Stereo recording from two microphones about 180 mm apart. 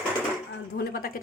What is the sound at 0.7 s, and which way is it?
Speech, 55° left (ahead or behind).